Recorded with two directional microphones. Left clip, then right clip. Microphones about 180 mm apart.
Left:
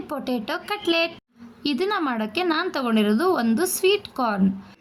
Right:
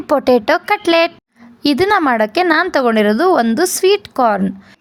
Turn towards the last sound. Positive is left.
turn(degrees=-35)  # may be behind; listen again after turning